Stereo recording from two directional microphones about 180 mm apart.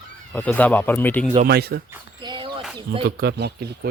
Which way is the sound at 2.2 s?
25° right (ahead or behind).